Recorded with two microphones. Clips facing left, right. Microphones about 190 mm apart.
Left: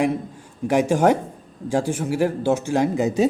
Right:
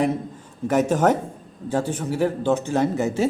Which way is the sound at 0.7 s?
10° left (ahead or behind).